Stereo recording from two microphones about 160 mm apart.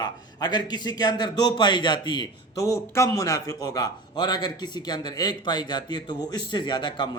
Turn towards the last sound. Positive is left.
turn(degrees=30)  # may be behind; listen again after turning